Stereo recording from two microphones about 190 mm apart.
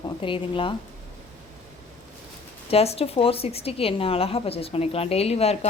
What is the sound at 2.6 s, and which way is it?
A woman's voice, 30° left (ahead or behind).